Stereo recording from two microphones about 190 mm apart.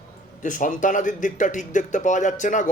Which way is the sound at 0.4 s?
40° left (ahead or behind).